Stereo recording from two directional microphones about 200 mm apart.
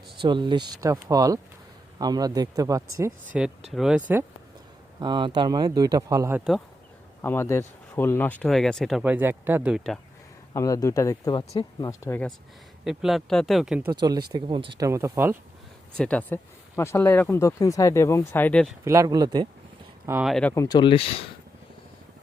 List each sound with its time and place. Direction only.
0.2 s speech: 25° right (ahead or behind)
3.3 s speech: 5° right (ahead or behind)
4.9 s speech: 20° right (ahead or behind); by 6.6 s 5° right (ahead or behind)
7.2 s speech: 10° left (ahead or behind)
10.5 s speech: 15° left (ahead or behind)
12.8 s speech: centre (ahead or behind)
13.9 s speech: 20° right (ahead or behind)
16.0 s speech: 5° left (ahead or behind)
18.9 s speech: 15° right (ahead or behind)
20.1 s speech: 5° right (ahead or behind)
20.5 s speech: 15° left (ahead or behind)